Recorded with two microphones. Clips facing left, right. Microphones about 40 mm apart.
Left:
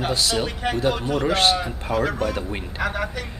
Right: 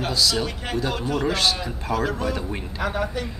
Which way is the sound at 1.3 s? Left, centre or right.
Left.